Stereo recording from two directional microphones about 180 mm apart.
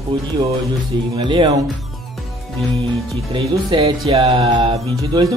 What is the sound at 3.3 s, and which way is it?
Speech, 25° right (ahead or behind).